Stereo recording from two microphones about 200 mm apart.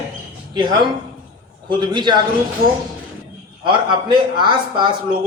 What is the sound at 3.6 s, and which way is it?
A man's voice, 25° right (ahead or behind).